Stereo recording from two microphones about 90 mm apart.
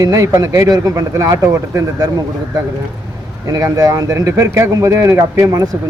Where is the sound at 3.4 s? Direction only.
40° right (ahead or behind).